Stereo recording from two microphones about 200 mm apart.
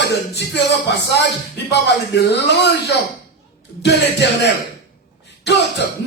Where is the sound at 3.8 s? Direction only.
60° left (ahead or behind).